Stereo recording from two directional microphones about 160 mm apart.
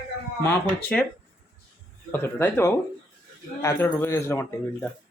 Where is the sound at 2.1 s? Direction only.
15° left (ahead or behind).